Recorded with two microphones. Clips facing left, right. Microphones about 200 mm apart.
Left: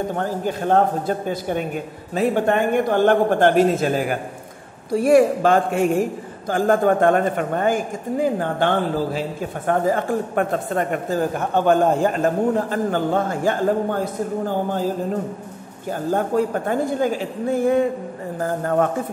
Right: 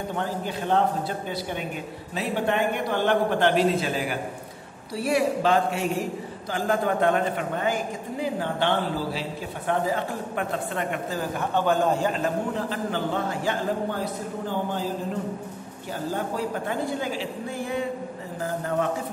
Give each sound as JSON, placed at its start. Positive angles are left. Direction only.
{"t": 0.1, "sound": "a man's voice", "side_deg": 45}
{"t": 15.9, "sound": "a man's voice", "side_deg": 50}